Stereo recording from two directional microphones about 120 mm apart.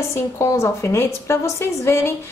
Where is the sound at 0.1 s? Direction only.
25° left (ahead or behind).